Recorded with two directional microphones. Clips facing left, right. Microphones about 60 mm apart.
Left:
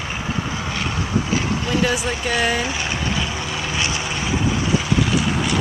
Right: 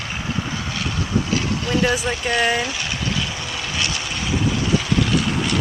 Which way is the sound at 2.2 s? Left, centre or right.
Centre.